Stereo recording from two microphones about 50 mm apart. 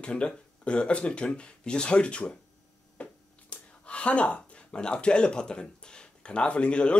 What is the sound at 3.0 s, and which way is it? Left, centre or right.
Finger snapping, left.